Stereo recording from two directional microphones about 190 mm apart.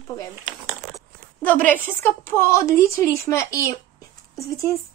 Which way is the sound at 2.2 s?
15° left (ahead or behind).